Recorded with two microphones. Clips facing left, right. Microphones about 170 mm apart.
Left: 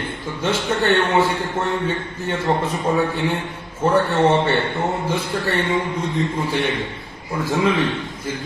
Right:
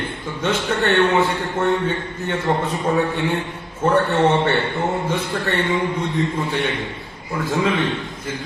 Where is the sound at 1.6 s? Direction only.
20° left (ahead or behind).